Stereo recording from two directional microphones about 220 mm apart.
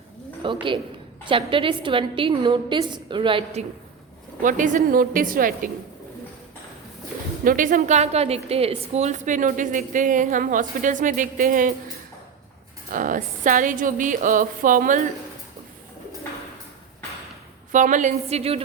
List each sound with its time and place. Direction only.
0.4 s a woman's voice: 20° right (ahead or behind); by 5.7 s 40° right (ahead or behind)
7.4 s a woman's voice: 35° right (ahead or behind)
12.9 s a woman's voice: 40° right (ahead or behind)
17.7 s a woman's voice: 35° right (ahead or behind)